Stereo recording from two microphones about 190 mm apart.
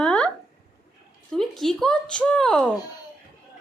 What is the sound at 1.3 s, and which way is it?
A woman's voice, centre (ahead or behind).